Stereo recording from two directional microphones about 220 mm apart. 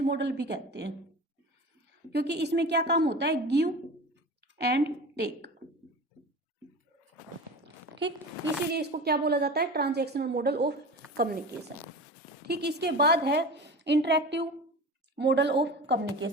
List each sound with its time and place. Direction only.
0.1 s a woman's voice: 50° right (ahead or behind)
2.1 s a woman's voice: 50° right (ahead or behind)
8.0 s a woman's voice: 55° right (ahead or behind)
12.5 s a woman's voice: 50° right (ahead or behind)